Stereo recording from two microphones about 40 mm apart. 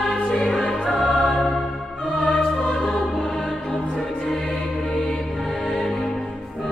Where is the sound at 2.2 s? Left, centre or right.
Left.